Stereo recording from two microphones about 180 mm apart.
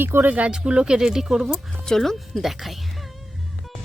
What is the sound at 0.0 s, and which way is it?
Speech, 10° right (ahead or behind).